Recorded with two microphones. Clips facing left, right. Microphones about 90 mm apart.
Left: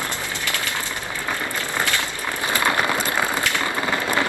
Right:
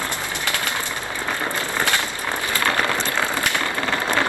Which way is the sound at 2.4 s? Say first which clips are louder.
Left 2 dB; 20° left (ahead or behind).